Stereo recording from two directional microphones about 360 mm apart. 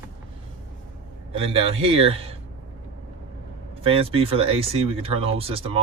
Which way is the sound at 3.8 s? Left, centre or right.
Centre.